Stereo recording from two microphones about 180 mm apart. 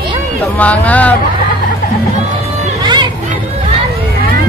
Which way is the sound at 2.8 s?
25° right (ahead or behind).